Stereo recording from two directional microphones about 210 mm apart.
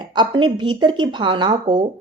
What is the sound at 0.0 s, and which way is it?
A woman's voice, 20° right (ahead or behind).